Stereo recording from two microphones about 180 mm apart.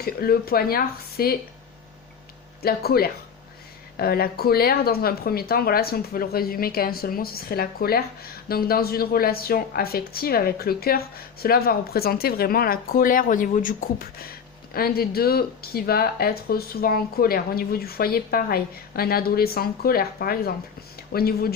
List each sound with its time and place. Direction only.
0.0 s a woman's voice: 60° left (ahead or behind)
2.6 s a woman's voice: 60° left (ahead or behind)